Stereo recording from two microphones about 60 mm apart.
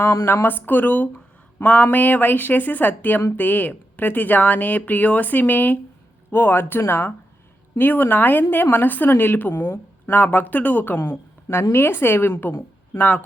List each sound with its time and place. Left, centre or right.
0.0 s speech: left
0.4 s a woman's voice: left